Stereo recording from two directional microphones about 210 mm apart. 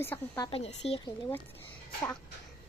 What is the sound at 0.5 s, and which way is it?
Speech, 30° left (ahead or behind).